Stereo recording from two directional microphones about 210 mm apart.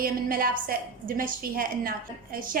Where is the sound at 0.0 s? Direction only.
45° right (ahead or behind).